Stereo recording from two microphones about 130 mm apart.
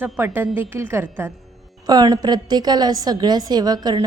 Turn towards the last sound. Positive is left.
turn(degrees=-30)  # may be behind; listen again after turning